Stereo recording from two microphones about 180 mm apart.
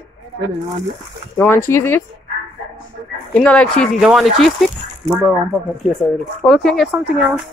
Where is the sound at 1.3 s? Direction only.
10° left (ahead or behind).